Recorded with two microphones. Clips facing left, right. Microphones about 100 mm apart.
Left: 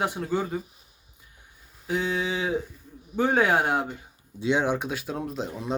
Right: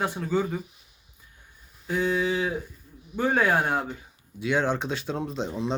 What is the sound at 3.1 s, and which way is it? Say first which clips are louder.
Speech: left 1 dB; 20° left (ahead or behind).